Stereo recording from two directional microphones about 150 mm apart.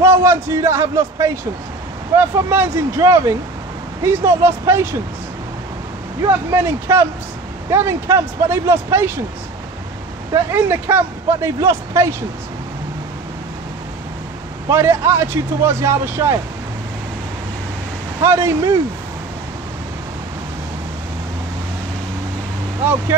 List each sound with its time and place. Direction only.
0.0 s a man's voice: 15° right (ahead or behind)
6.5 s speech: 15° right (ahead or behind)
10.3 s speech: 15° right (ahead or behind)
14.7 s speech: 15° right (ahead or behind)
18.2 s speech: 15° right (ahead or behind)